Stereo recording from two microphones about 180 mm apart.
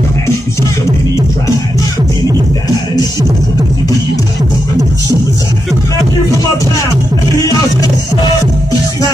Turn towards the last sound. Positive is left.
turn(degrees=20)  # may be behind; listen again after turning